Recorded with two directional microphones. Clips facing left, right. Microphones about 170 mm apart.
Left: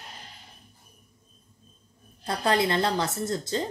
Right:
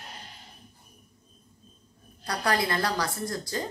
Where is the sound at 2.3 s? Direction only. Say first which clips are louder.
Left 3 dB; 25° left (ahead or behind).